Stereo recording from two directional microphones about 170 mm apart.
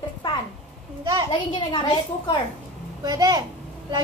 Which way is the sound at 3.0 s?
25° right (ahead or behind).